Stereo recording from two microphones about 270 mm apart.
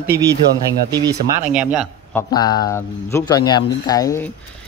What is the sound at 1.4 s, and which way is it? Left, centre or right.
Speech, centre.